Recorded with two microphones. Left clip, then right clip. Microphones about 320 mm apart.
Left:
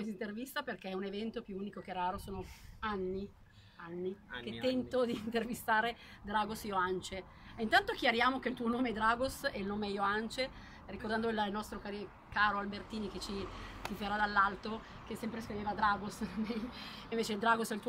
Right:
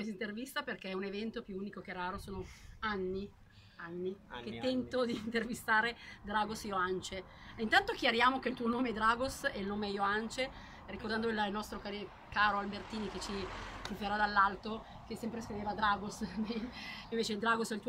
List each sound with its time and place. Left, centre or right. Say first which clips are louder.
0.0 s a woman's voice: right 1 dB; centre
4.5 s a woman's voice: left 1 dB; centre